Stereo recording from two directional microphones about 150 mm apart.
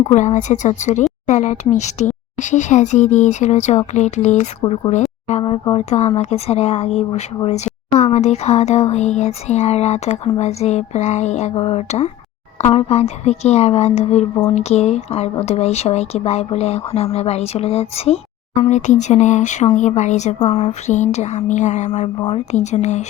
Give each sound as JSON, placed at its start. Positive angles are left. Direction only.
{"t": 0.1, "sound": "speech", "side_deg": 50}
{"t": 4.6, "sound": "speech", "side_deg": 30}
{"t": 5.7, "sound": "speech", "side_deg": 45}